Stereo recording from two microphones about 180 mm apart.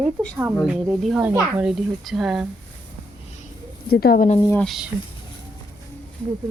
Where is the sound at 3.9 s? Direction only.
60° left (ahead or behind).